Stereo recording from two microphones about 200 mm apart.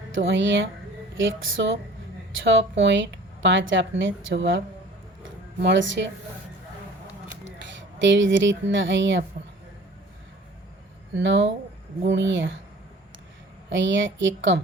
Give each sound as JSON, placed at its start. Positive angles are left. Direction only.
{"t": 0.1, "sound": "speech", "side_deg": -65}
{"t": 7.8, "sound": "speech", "side_deg": -65}
{"t": 11.1, "sound": "speech", "side_deg": -65}
{"t": 13.7, "sound": "speech", "side_deg": -65}